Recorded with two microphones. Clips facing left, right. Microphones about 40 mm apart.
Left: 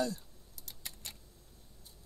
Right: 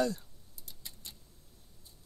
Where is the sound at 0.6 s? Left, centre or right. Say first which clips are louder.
Left 3 dB; left.